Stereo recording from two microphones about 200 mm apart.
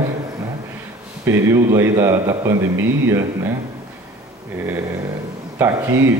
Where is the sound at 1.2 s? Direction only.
15° right (ahead or behind).